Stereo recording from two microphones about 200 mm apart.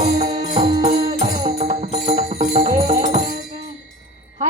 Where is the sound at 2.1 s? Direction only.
45° right (ahead or behind).